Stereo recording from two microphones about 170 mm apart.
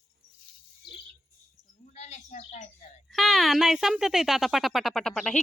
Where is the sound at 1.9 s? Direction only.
40° left (ahead or behind).